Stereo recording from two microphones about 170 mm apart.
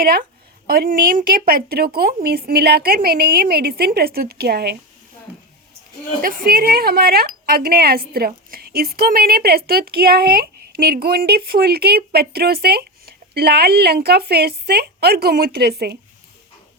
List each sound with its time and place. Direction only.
0.0 s a woman's voice: 60° right (ahead or behind)
6.2 s a woman's voice: 55° right (ahead or behind)